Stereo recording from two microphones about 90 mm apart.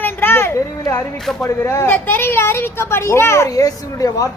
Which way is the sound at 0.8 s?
40° left (ahead or behind).